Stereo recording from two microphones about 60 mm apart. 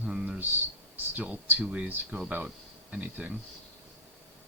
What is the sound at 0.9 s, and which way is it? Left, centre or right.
Speech, right.